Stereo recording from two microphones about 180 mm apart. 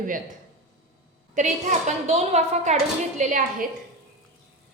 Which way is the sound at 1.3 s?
40° right (ahead or behind).